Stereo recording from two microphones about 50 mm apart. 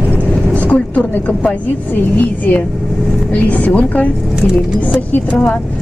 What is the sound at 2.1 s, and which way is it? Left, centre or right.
A woman's voice, left.